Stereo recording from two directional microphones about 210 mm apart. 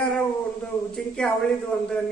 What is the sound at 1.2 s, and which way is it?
Speech, 5° left (ahead or behind).